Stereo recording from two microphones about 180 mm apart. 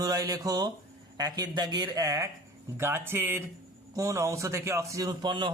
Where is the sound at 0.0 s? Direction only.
20° right (ahead or behind).